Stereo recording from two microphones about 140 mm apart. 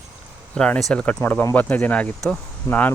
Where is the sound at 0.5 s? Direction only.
5° left (ahead or behind).